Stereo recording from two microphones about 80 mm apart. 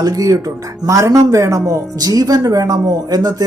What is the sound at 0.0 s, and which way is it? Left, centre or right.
Speech, right.